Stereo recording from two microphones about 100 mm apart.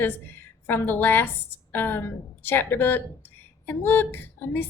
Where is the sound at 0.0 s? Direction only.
20° left (ahead or behind).